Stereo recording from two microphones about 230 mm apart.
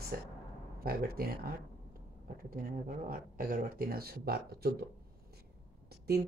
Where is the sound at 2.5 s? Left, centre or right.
Right.